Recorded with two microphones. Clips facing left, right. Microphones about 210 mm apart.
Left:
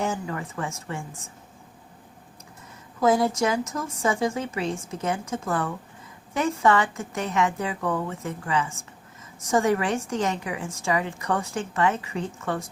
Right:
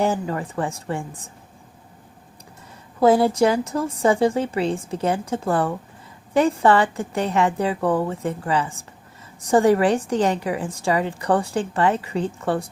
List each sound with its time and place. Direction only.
0.0 s a woman's voice: 35° right (ahead or behind)
3.0 s a woman's voice: 30° right (ahead or behind)